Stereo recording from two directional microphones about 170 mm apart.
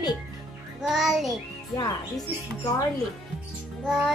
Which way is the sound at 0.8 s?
Centre (ahead or behind).